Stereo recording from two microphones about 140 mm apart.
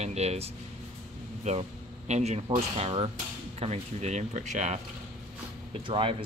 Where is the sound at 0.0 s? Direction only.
50° right (ahead or behind).